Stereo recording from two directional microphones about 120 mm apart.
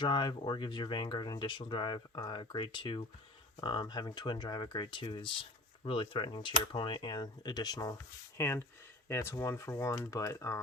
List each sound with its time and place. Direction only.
0.0 s speech: 40° left (ahead or behind)
8.4 s speech: 20° left (ahead or behind)